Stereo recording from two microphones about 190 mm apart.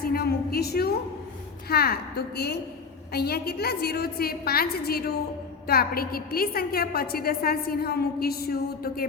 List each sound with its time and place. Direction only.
0.0 s a woman's voice: 55° left (ahead or behind)